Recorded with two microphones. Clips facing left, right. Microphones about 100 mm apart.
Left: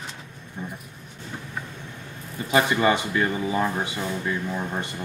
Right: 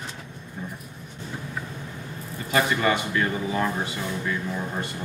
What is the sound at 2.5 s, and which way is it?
Speech, 20° left (ahead or behind).